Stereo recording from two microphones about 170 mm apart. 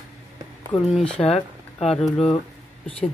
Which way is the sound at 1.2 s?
35° left (ahead or behind).